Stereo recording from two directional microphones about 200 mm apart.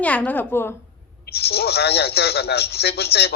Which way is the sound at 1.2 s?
50° left (ahead or behind).